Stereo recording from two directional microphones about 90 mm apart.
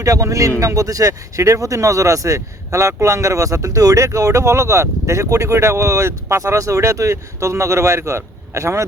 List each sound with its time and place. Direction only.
0.0 s speech: 35° right (ahead or behind)